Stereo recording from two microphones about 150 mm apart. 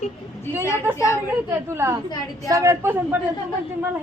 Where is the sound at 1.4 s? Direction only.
20° right (ahead or behind).